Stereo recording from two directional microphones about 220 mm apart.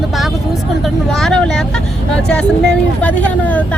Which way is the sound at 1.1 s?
Centre (ahead or behind).